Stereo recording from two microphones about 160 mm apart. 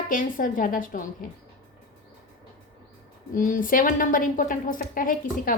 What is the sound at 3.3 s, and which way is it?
A woman's voice, 55° left (ahead or behind).